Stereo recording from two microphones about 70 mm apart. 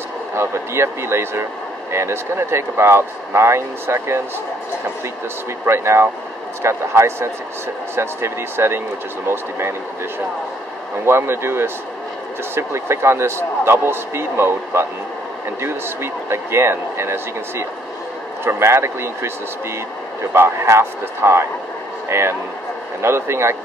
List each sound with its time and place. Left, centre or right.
0.4 s speech: right
5.7 s speech: right
11.1 s speech: right
20.3 s speech: right